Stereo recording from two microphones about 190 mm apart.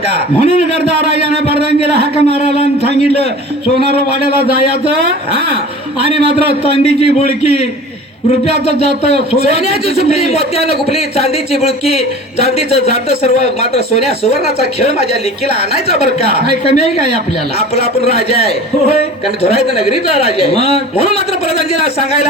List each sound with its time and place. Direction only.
0.1 s a sound: 65° right (ahead or behind)
3.0 s a man's voice: 30° left (ahead or behind)
6.1 s a man's voice: 30° left (ahead or behind)
9.9 s a man's voice: 30° left (ahead or behind)
12.5 s a man's voice: 35° left (ahead or behind)
13.6 s a woman's voice: 60° right (ahead or behind)
16.0 s a woman's voice: 55° right (ahead or behind)
16.6 s a man's voice: 35° left (ahead or behind)
19.7 s a man's voice: 30° left (ahead or behind)